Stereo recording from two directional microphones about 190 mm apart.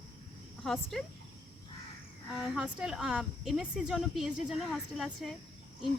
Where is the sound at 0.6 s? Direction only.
Centre (ahead or behind).